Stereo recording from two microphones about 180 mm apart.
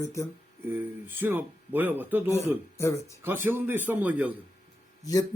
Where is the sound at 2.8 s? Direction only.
15° left (ahead or behind).